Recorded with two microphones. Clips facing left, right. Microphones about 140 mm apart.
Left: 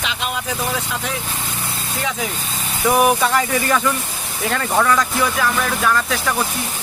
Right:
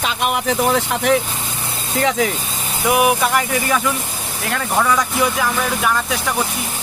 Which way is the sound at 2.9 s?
10° right (ahead or behind).